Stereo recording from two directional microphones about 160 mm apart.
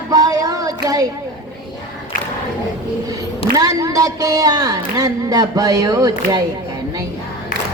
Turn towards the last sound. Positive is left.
turn(degrees=-25)  # may be behind; listen again after turning